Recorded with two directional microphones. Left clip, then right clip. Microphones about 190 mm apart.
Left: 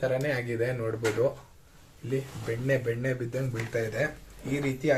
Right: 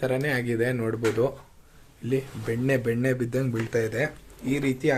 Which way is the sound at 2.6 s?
60° right (ahead or behind).